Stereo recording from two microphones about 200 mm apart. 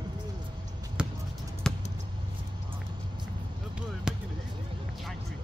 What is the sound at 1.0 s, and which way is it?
Basketball bounce, 5° right (ahead or behind).